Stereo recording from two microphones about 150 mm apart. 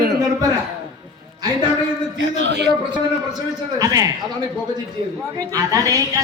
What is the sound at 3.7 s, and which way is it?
Speech, 25° right (ahead or behind).